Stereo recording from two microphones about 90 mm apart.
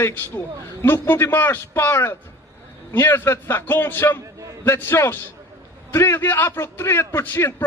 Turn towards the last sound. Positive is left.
turn(degrees=25)  # may be behind; listen again after turning